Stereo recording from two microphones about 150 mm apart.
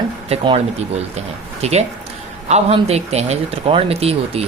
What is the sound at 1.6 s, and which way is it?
Speech, 45° right (ahead or behind).